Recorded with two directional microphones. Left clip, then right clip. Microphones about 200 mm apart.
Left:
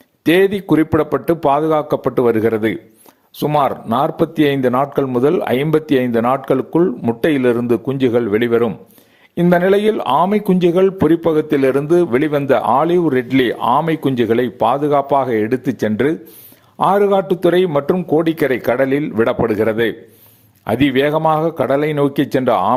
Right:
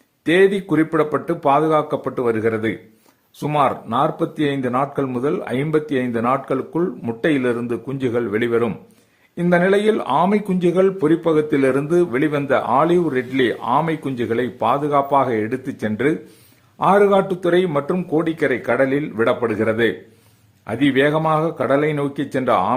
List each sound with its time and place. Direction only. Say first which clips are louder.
0.3 s speech: left 2 dB; 35° left (ahead or behind)